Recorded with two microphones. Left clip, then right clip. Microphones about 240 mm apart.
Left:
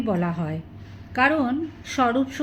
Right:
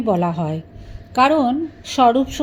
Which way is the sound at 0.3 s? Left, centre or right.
Right.